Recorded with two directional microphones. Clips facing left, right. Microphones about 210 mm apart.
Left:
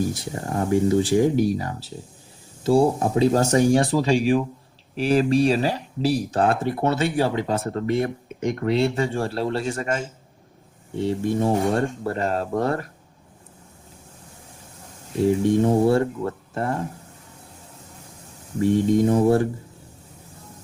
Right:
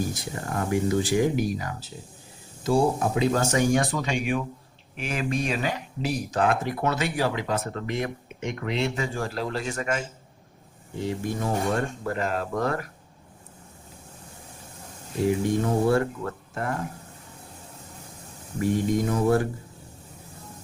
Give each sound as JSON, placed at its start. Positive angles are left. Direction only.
{"t": 0.1, "sound": "speech", "side_deg": 30}
{"t": 15.3, "sound": "speech", "side_deg": 30}
{"t": 18.6, "sound": "speech", "side_deg": 30}